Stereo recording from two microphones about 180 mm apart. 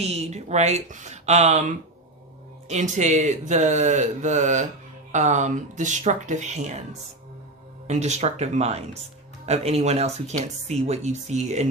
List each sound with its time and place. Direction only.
0.0 s speech: 35° right (ahead or behind)
7.9 s speech: 40° right (ahead or behind)